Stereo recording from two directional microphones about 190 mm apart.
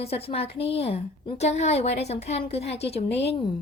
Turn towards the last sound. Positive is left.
turn(degrees=30)  # may be behind; listen again after turning